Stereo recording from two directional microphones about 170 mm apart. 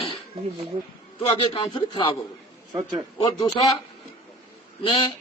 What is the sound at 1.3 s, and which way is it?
Speech, 30° left (ahead or behind).